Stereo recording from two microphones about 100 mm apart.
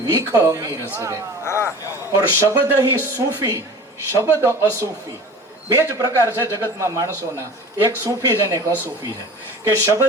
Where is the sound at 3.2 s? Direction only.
35° right (ahead or behind).